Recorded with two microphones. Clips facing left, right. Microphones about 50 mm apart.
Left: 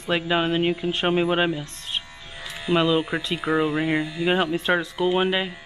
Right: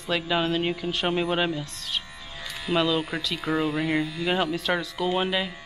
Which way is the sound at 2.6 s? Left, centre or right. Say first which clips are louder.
Left 3 dB; centre.